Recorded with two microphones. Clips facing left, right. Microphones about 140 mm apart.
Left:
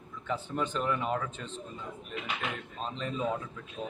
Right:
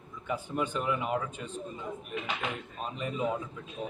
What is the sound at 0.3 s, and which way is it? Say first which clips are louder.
A man's voice: right 1 dB; 10° right (ahead or behind).